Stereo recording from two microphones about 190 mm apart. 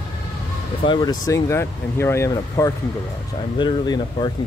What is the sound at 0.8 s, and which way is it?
Speech, 20° left (ahead or behind).